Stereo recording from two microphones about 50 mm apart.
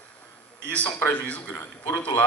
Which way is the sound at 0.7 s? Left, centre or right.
Left.